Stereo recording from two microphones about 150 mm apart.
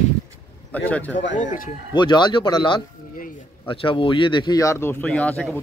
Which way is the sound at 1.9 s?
30° left (ahead or behind).